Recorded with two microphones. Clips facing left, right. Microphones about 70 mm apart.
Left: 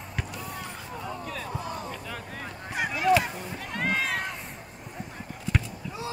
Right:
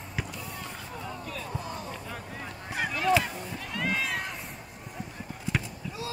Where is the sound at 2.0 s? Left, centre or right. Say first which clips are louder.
Left 2 dB; left.